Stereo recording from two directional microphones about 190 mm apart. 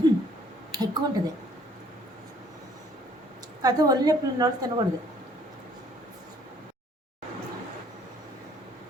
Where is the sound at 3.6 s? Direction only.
20° right (ahead or behind).